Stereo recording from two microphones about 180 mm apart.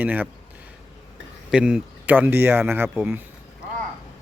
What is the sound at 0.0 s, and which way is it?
Speech, 10° right (ahead or behind).